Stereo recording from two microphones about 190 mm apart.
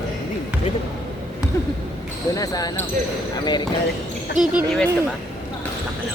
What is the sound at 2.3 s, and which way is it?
Speech, 20° left (ahead or behind).